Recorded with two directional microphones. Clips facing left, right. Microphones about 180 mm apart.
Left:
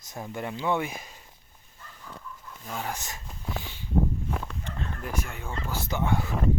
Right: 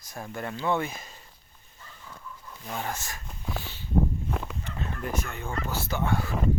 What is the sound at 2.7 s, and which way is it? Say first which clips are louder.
Speech: even; 5° left (ahead or behind).